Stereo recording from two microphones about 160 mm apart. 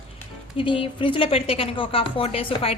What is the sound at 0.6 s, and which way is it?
Speech, 35° left (ahead or behind).